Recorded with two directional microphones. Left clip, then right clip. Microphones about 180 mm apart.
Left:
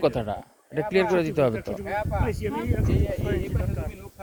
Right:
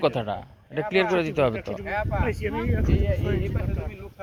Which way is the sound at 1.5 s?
85° left.